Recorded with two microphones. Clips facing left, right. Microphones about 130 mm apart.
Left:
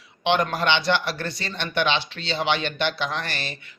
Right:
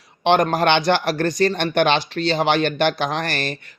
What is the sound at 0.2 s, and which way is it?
Speech, 40° right (ahead or behind).